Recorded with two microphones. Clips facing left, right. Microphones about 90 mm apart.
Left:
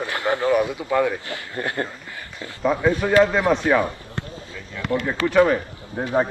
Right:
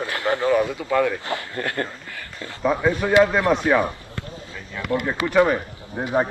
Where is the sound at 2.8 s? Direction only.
15° right (ahead or behind).